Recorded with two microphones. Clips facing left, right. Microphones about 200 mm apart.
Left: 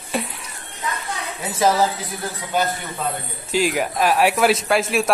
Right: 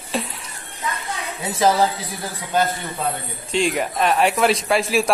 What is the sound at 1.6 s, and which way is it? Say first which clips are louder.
Speech: even; centre (ahead or behind).